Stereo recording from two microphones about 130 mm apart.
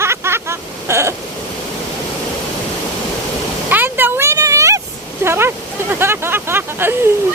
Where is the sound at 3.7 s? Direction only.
15° right (ahead or behind).